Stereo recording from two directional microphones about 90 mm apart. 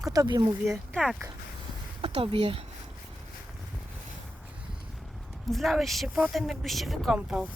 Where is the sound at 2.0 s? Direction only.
90° right.